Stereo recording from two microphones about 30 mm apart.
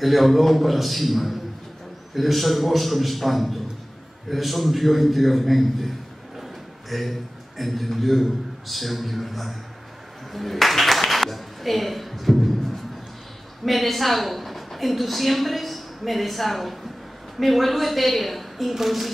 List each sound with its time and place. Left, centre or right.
0.0 s a man's voice: centre